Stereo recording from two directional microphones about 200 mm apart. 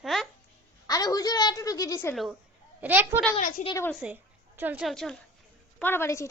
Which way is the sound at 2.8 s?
10° right (ahead or behind).